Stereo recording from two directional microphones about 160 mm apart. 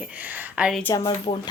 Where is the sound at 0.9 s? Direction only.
25° left (ahead or behind).